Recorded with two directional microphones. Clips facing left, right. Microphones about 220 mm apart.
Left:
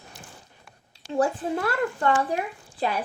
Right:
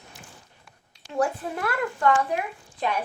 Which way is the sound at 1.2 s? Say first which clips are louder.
Left 2 dB; 25° left (ahead or behind).